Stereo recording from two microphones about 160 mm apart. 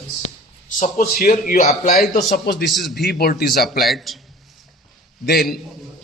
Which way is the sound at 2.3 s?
85° left.